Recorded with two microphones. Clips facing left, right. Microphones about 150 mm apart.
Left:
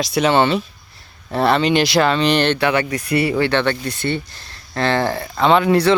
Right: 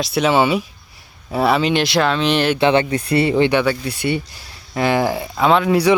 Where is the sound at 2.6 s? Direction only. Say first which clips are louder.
Right 3 dB; 25° right (ahead or behind).